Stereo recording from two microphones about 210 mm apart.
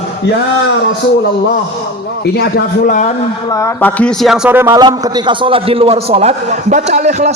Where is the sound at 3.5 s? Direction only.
15° left (ahead or behind).